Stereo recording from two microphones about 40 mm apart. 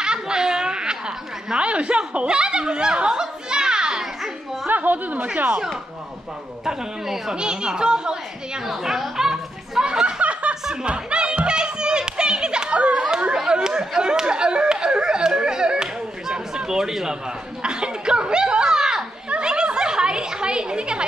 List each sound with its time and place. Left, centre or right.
0.0 s a sound: centre
4.6 s speech: right
6.6 s speech: centre
8.6 s chatter: centre
9.8 s snicker: right
10.9 s music: right
13.3 s a sound: centre